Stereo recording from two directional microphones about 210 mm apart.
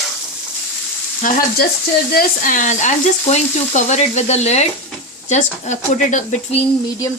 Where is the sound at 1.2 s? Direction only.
40° left (ahead or behind).